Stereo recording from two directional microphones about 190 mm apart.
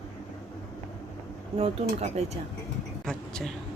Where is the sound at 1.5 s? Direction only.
30° right (ahead or behind).